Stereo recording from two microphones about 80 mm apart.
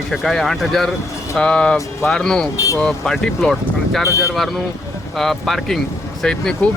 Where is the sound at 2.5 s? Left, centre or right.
Left.